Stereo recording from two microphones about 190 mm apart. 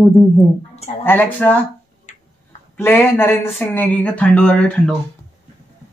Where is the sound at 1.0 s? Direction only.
10° left (ahead or behind).